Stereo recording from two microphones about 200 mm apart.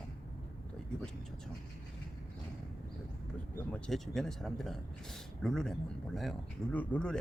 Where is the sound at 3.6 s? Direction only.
5° left (ahead or behind).